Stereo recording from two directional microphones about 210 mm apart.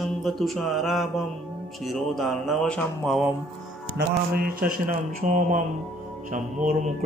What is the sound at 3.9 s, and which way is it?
Mantra, 45° right (ahead or behind).